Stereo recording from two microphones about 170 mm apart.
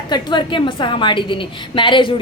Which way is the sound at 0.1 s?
25° left (ahead or behind).